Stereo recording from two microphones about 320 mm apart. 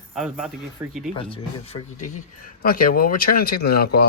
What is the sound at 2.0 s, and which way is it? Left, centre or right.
Speech, left.